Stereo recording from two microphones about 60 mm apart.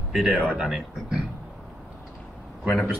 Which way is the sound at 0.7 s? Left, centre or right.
Centre.